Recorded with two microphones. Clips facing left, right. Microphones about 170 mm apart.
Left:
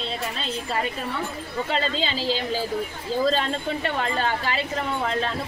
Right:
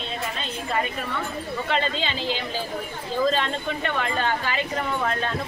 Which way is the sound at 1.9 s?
35° left (ahead or behind).